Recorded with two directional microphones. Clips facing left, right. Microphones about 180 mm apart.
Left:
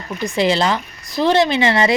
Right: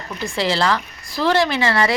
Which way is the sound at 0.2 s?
20° left (ahead or behind).